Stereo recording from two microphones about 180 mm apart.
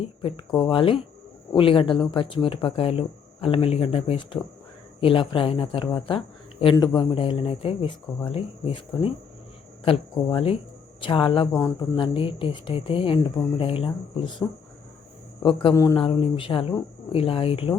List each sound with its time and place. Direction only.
0.0 s speech: 30° left (ahead or behind)
11.6 s speech: 15° left (ahead or behind)
11.9 s speech: 30° left (ahead or behind)
15.7 s speech: 15° left (ahead or behind)
16.0 s speech: 30° left (ahead or behind)